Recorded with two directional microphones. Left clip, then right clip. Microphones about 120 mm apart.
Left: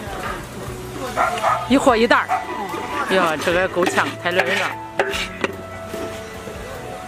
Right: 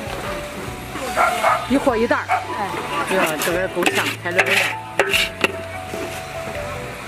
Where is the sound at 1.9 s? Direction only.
50° left (ahead or behind).